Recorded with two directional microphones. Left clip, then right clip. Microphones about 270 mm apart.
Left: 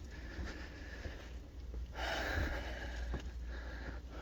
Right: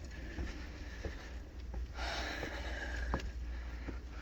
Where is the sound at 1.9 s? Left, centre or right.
Centre.